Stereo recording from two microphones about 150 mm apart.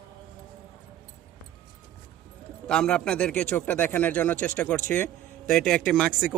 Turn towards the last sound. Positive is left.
turn(degrees=5)  # may be behind; listen again after turning